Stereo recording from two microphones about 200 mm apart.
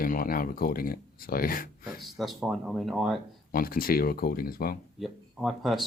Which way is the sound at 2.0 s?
Centre (ahead or behind).